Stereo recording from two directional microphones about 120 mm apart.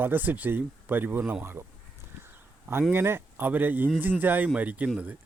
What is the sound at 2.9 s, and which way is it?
Speech, 20° right (ahead or behind).